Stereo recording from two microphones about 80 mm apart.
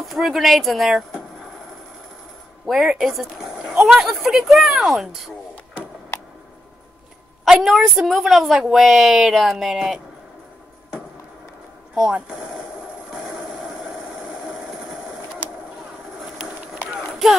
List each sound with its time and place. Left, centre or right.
0.1 s speech: centre
2.6 s speech: centre
7.4 s speech: centre
11.9 s speech: centre
13.5 s vehicle: centre
17.1 s a sound: centre